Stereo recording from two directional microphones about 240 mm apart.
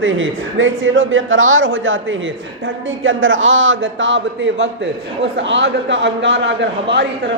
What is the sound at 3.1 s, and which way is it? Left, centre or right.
A man's voice, right.